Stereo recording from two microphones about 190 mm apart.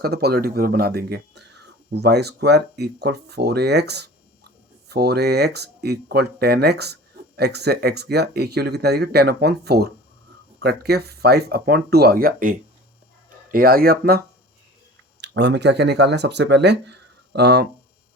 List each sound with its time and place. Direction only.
0.0 s speech: 55° right (ahead or behind)
15.2 s speech: 65° right (ahead or behind)